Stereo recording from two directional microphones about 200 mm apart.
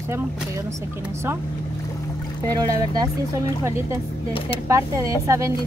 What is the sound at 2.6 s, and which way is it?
Speech, 20° right (ahead or behind).